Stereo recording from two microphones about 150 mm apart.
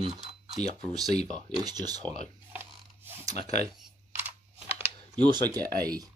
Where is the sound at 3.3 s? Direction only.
50° left (ahead or behind).